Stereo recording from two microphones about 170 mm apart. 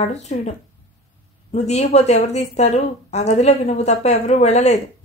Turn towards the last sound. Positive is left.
turn(degrees=40)  # may be behind; listen again after turning